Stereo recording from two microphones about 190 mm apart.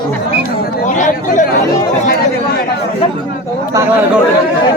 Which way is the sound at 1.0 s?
40° left (ahead or behind).